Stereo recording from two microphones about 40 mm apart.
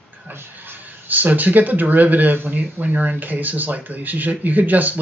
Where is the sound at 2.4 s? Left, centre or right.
Right.